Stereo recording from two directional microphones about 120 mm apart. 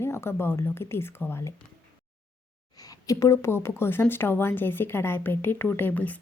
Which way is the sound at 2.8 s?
30° left (ahead or behind).